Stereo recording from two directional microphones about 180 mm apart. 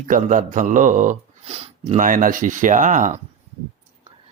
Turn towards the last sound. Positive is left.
turn(degrees=-45)  # may be behind; listen again after turning